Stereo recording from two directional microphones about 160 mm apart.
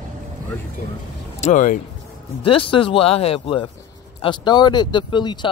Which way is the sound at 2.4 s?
35° left (ahead or behind).